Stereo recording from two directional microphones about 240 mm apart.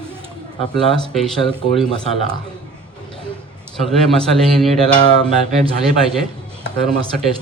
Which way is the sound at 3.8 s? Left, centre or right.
Centre.